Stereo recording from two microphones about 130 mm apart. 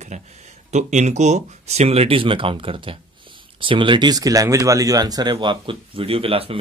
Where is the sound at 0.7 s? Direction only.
65° right (ahead or behind).